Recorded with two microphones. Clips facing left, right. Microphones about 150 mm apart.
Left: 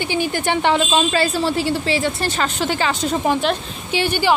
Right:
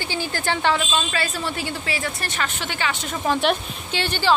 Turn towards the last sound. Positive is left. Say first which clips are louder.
# left 4 dB
turn(degrees=10)  # may be behind; listen again after turning